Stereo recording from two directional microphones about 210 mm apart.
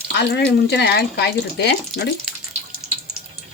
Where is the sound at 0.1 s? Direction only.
55° left (ahead or behind).